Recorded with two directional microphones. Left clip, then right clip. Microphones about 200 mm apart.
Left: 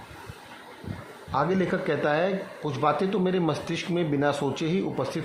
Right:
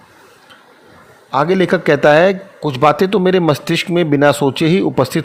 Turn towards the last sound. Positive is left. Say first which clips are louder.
# right 14 dB
turn(degrees=-40)  # may be behind; listen again after turning